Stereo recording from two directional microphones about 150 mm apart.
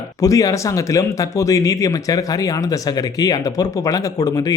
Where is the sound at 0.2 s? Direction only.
25° left (ahead or behind).